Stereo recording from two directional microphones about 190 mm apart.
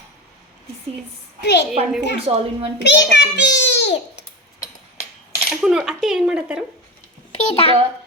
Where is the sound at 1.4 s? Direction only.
60° left (ahead or behind).